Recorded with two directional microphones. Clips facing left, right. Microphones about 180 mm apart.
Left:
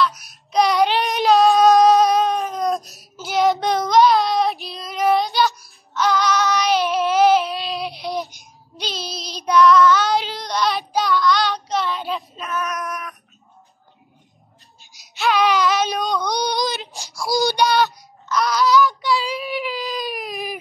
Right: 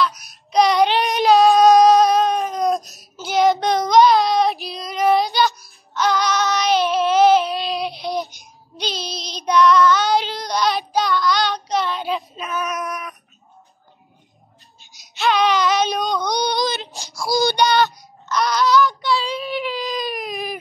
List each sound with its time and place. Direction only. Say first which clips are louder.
0.1 s child singing: right 2 dB; centre (ahead or behind)
14.8 s baby cry: right 1 dB; centre (ahead or behind)
17.2 s child singing: right 1 dB; 15° left (ahead or behind)
17.6 s child singing: right 1 dB; 5° left (ahead or behind)